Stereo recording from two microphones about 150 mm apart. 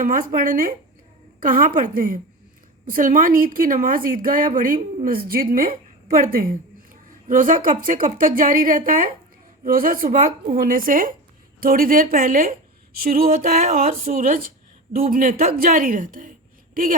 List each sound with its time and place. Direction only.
0.0 s speech: 70° right (ahead or behind)